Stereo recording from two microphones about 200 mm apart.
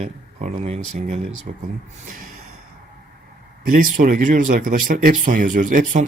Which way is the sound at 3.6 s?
45° right (ahead or behind).